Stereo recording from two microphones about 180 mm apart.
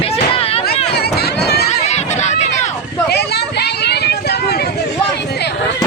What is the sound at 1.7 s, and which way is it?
Run, 35° left (ahead or behind).